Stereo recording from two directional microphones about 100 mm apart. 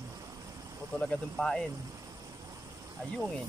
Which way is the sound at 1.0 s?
10° left (ahead or behind).